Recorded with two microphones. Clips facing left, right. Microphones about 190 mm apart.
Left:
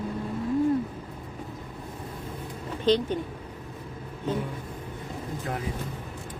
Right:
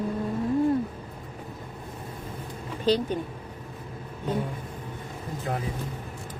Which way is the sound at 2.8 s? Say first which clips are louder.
Left 1 dB; 10° right (ahead or behind).